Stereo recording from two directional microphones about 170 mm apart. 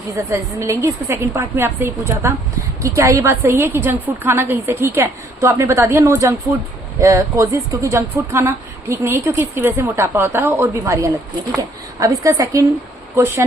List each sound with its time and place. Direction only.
0.2 s speech: 15° right (ahead or behind)